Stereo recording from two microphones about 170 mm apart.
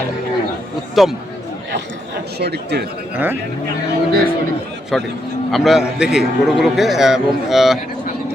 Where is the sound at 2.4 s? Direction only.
75° right (ahead or behind).